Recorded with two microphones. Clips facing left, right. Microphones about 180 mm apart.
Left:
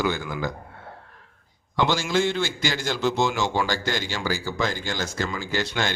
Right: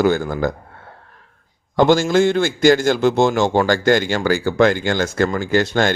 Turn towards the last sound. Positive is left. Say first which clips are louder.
# right 10 dB
turn(degrees=-50)  # may be behind; listen again after turning